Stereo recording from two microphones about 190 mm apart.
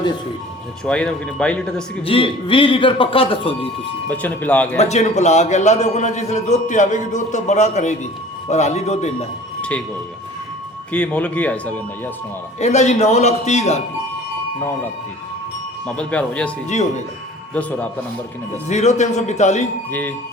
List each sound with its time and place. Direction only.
0.9 s speech: 5° left (ahead or behind)
2.0 s speech: 30° left (ahead or behind)
4.1 s speech: 10° left (ahead or behind)
4.8 s a man's voice: 35° left (ahead or behind)
9.6 s a sound: 5° left (ahead or behind)
10.9 s speech: 5° left (ahead or behind)
12.5 s a man's voice: 35° left (ahead or behind)
16.0 s speech: 5° left (ahead or behind)
16.6 s a man's voice: 40° left (ahead or behind)
17.5 s speech: 10° left (ahead or behind)
18.7 s a man's voice: 35° left (ahead or behind)
19.9 s speech: 10° left (ahead or behind)